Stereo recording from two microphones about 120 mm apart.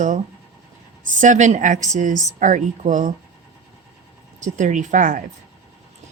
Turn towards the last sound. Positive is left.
turn(degrees=-90)